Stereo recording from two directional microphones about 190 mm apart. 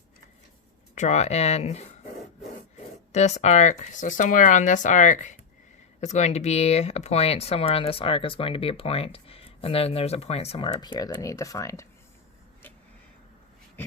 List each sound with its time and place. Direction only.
0.9 s speech: 35° left (ahead or behind)
3.1 s speech: 35° left (ahead or behind); by 11.9 s 15° left (ahead or behind)